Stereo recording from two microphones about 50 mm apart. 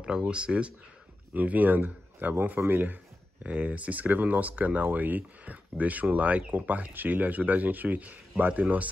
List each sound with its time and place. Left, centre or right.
0.0 s speech: centre
1.3 s speech: right